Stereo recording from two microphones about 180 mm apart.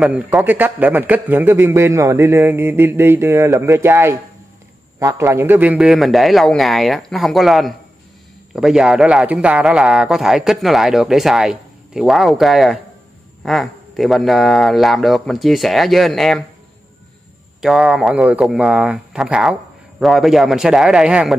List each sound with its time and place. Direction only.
0.0 s a man's voice: 5° right (ahead or behind)
5.2 s a man's voice: 15° right (ahead or behind); by 16.4 s centre (ahead or behind)
17.6 s a man's voice: centre (ahead or behind)